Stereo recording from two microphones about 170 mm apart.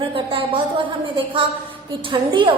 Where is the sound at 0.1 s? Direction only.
30° right (ahead or behind).